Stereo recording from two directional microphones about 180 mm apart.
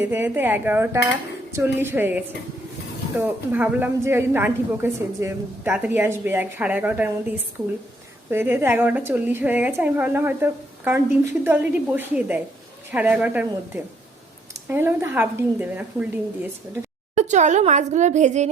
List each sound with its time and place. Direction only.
0.0 s a woman's voice: 10° right (ahead or behind)
17.2 s a woman's voice: 40° right (ahead or behind)